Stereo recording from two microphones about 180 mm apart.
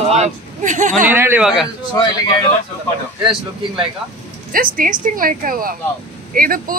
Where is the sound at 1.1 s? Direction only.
10° right (ahead or behind).